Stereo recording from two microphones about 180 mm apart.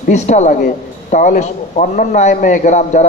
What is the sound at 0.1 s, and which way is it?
A man's voice, 40° left (ahead or behind).